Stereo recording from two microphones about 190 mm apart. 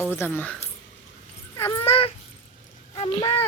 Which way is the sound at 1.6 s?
15° left (ahead or behind).